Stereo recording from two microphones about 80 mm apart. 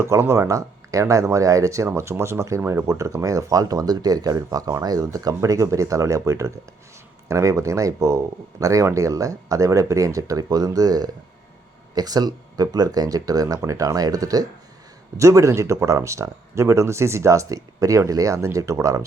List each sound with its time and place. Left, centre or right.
0.0 s speech: right